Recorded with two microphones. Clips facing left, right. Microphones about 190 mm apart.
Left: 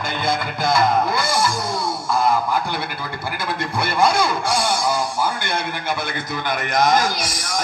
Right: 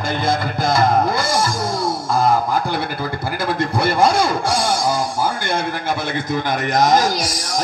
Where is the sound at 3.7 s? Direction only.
40° right (ahead or behind).